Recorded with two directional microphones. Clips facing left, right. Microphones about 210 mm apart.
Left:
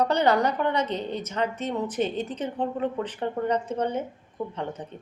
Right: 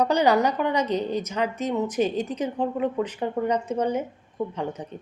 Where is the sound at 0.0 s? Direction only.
10° right (ahead or behind).